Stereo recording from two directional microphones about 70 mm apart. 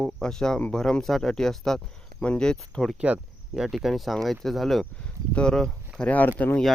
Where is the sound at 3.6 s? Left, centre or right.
Centre.